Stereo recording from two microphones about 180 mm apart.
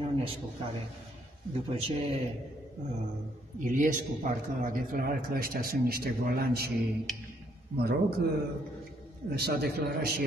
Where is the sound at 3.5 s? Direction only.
45° right (ahead or behind).